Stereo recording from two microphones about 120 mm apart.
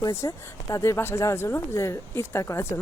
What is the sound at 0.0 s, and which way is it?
Speech, 25° left (ahead or behind).